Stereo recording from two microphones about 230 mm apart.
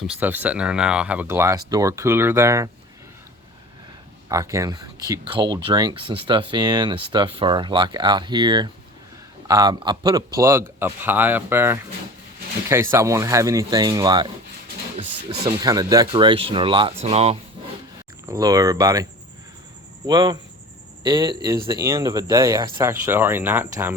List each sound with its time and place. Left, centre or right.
0.2 s speech: centre
4.3 s speech: centre
15.4 s speech: centre
18.3 s speech: centre
20.1 s speech: centre